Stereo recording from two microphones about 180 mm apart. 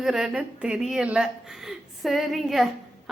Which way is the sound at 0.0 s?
5° right (ahead or behind).